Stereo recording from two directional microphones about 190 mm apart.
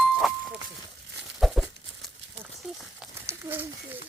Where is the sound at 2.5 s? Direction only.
Centre (ahead or behind).